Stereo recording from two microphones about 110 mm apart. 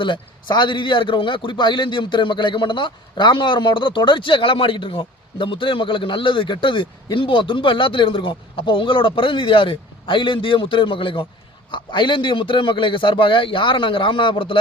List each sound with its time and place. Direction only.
0.0 s a man's voice: 45° left (ahead or behind)